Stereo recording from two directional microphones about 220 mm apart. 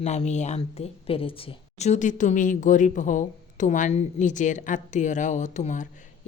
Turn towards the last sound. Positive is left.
turn(degrees=35)  # may be behind; listen again after turning